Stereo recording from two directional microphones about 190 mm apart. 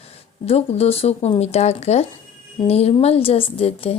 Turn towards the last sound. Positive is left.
turn(degrees=30)  # may be behind; listen again after turning